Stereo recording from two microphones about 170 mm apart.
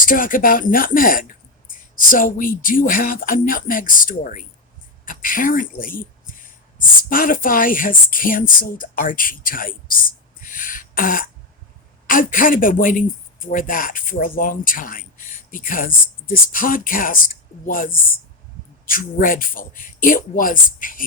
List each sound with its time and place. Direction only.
0.0 s speech: 55° left (ahead or behind)